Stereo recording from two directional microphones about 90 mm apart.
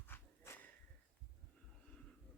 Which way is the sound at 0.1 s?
25° left (ahead or behind).